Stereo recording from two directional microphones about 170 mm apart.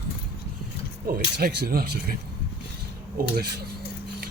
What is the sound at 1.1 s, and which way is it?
Speech, 60° right (ahead or behind).